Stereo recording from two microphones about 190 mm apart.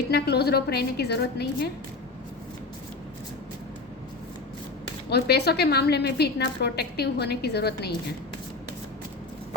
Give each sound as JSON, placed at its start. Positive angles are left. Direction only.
{"t": 0.1, "sound": "a woman's voice", "side_deg": 60}
{"t": 5.0, "sound": "a woman's voice", "side_deg": 60}